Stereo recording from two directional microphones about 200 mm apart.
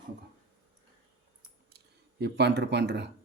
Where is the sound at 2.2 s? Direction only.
60° right (ahead or behind).